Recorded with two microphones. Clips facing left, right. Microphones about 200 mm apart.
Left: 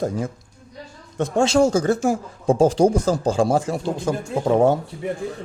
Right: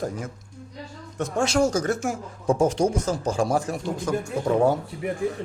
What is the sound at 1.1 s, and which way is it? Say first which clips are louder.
Speech: left 5 dB; 25° left (ahead or behind).